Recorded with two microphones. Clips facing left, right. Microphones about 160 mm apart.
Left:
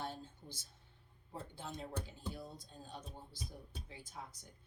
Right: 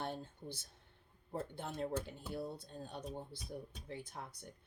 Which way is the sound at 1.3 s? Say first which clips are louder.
Right 5 dB; 55° right (ahead or behind).